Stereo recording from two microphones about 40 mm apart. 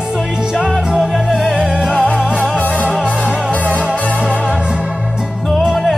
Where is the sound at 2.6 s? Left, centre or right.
Left.